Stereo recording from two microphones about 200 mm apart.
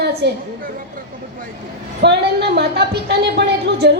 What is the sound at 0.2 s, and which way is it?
Speech, 55° right (ahead or behind).